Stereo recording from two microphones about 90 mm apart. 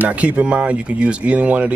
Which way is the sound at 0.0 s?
15° right (ahead or behind).